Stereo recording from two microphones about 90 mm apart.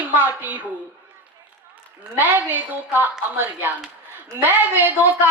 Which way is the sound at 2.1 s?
20° right (ahead or behind).